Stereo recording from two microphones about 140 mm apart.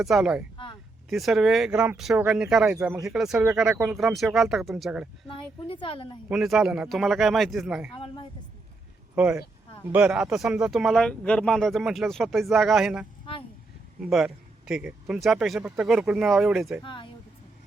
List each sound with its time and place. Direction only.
0.0 s speech: centre (ahead or behind)
0.5 s a sound: 35° left (ahead or behind)
1.1 s speech: centre (ahead or behind)
5.3 s speech: 40° left (ahead or behind)
6.2 s speech: 5° right (ahead or behind)
7.9 s speech: 35° left (ahead or behind)
9.1 s speech: 10° right (ahead or behind)
16.8 s speech: 35° left (ahead or behind)